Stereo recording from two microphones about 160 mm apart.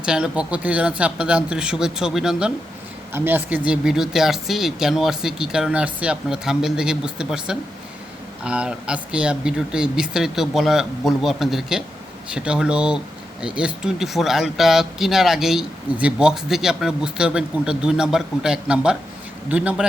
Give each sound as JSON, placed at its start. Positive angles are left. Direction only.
{"t": 0.0, "sound": "a man's voice", "side_deg": -5}